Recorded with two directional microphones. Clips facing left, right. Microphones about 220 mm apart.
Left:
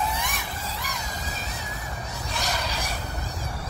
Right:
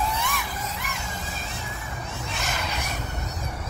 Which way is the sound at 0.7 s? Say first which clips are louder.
Even; 35° left (ahead or behind).